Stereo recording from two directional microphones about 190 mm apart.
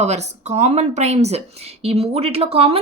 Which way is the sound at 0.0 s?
35° right (ahead or behind).